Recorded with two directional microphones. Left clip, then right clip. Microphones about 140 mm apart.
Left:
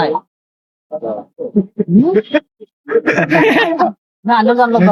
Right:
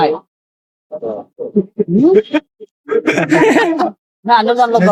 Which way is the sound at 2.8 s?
30° right (ahead or behind).